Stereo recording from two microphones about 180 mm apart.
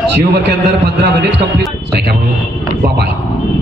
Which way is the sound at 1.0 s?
75° right (ahead or behind).